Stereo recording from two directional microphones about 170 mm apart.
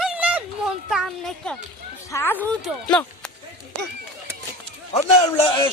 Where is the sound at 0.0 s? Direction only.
5° right (ahead or behind).